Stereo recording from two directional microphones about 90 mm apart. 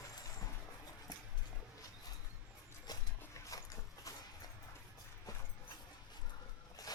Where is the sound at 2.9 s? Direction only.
40° left (ahead or behind).